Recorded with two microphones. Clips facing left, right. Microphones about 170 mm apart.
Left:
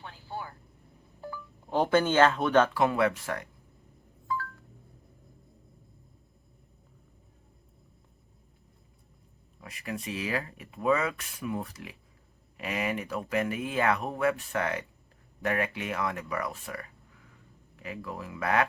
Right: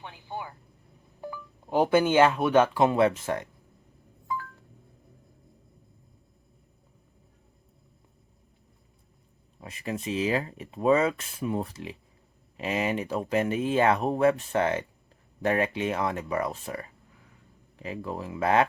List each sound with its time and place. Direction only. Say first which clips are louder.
0.0 s vehicle: right 2 dB; 20° right (ahead or behind)
1.2 s speech: right 2 dB; 15° right (ahead or behind)
2.8 s speech: right 4 dB; 25° right (ahead or behind)
9.6 s speech: right 4 dB; 25° right (ahead or behind)